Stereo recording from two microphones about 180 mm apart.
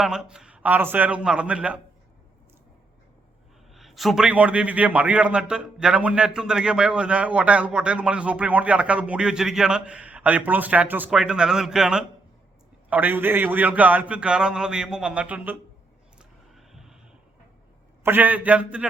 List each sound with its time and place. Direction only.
0.0 s a man's voice: 5° right (ahead or behind)
3.8 s a man's voice: centre (ahead or behind)
16.1 s a sound: centre (ahead or behind)
18.0 s a man's voice: 10° right (ahead or behind)